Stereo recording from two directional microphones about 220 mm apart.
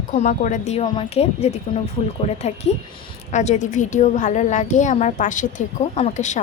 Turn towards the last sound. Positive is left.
turn(degrees=30)  # may be behind; listen again after turning